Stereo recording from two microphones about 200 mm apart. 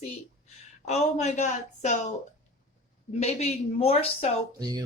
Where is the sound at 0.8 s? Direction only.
35° left (ahead or behind).